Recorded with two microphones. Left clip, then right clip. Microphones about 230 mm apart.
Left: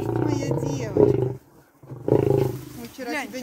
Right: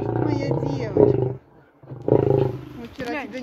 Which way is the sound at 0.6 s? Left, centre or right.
Left.